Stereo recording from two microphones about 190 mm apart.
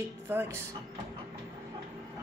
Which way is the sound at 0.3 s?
10° right (ahead or behind).